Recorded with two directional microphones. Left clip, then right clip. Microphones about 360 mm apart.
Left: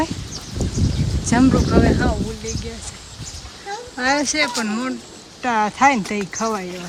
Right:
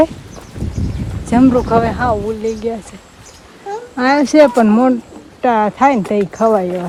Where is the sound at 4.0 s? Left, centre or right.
Centre.